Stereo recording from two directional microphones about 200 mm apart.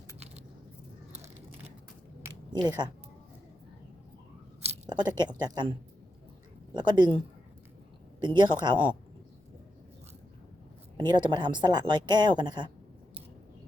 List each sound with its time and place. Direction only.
2.2 s a sound: 20° right (ahead or behind)
4.9 s a woman's voice: 20° right (ahead or behind)
6.7 s a woman's voice: 20° right (ahead or behind)
8.4 s a woman's voice: 20° right (ahead or behind)
10.9 s a woman's voice: 20° right (ahead or behind)